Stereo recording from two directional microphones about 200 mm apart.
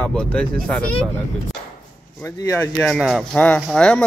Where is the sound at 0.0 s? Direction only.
5° left (ahead or behind).